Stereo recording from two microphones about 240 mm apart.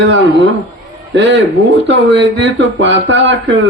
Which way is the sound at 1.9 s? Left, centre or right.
Right.